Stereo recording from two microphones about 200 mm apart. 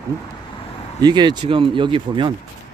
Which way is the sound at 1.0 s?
20° right (ahead or behind).